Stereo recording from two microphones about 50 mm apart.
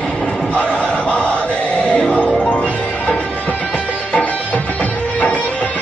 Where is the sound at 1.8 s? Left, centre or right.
Left.